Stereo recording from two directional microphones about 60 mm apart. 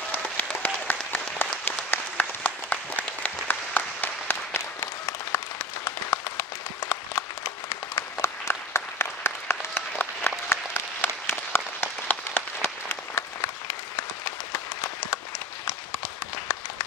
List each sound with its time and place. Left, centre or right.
0.1 s applause: left
4.6 s applause: left
12.1 s applause: left
12.6 s applause: left